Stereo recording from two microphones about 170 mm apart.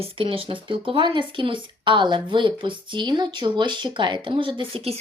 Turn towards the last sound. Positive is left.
turn(degrees=-35)  # may be behind; listen again after turning